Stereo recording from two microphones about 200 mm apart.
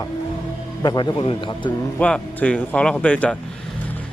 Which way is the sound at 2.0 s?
5° left (ahead or behind).